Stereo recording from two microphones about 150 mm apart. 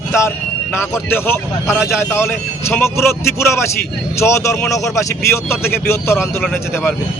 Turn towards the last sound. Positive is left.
turn(degrees=15)  # may be behind; listen again after turning